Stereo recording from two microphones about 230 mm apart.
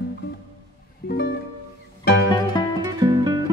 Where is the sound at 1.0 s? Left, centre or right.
Left.